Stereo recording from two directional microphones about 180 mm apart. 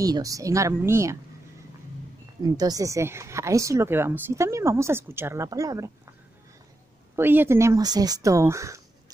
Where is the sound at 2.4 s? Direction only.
20° right (ahead or behind).